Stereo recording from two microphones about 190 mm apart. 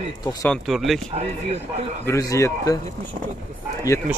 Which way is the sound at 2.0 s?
15° left (ahead or behind).